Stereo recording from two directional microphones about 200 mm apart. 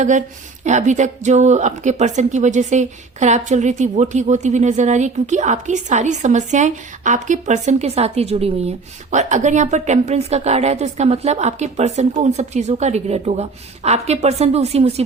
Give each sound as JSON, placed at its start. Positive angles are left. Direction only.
{"t": 0.0, "sound": "speech", "side_deg": -35}